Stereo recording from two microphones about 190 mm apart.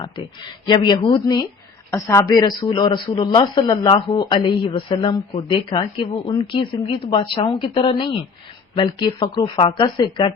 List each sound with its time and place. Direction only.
0.7 s speech: 25° left (ahead or behind)